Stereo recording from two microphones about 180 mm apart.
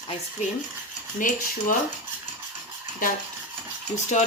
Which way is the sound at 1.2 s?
50° left (ahead or behind).